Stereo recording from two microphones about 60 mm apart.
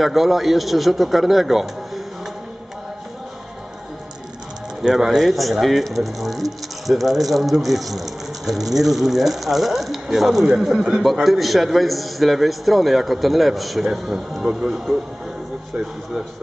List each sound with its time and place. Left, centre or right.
0.0 s a man's voice: centre
4.8 s a man's voice: centre